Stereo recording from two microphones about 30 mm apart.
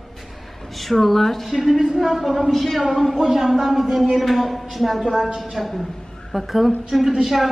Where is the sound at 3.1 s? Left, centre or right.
Centre.